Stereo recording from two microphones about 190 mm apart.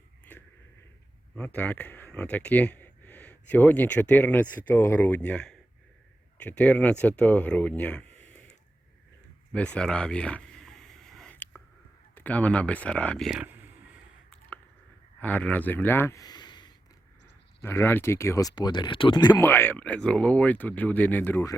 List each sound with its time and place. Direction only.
1.4 s speech: 10° left (ahead or behind)
9.5 s a sound: 5° left (ahead or behind)
12.1 s speech: 10° left (ahead or behind); by 13.7 s 10° right (ahead or behind)
15.2 s speech: 10° left (ahead or behind); by 16.7 s 25° left (ahead or behind)
17.6 s speech: 10° left (ahead or behind)